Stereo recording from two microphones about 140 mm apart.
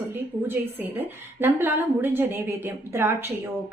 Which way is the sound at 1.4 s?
15° right (ahead or behind).